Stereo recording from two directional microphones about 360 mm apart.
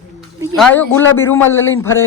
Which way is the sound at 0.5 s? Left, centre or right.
Centre.